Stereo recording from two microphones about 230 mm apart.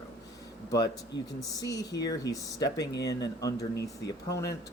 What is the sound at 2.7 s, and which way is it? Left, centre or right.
Speech, left.